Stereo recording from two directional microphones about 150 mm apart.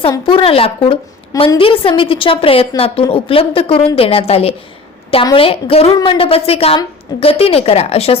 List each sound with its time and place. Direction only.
0.3 s a woman's voice: 35° left (ahead or behind)